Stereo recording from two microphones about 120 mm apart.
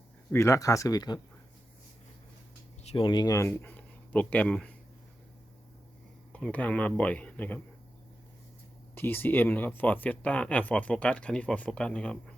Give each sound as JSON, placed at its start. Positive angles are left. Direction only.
{"t": 0.3, "sound": "speech", "side_deg": 25}
{"t": 2.8, "sound": "speech", "side_deg": 45}
{"t": 6.3, "sound": "speech", "side_deg": 10}
{"t": 9.0, "sound": "speech", "side_deg": 15}